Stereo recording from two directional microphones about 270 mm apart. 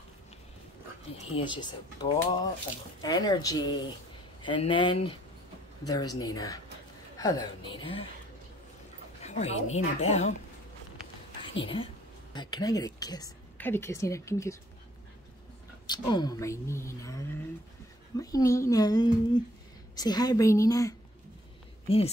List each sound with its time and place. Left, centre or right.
1.1 s speech: centre
9.2 s speech: left
11.6 s speech: centre
15.9 s speech: centre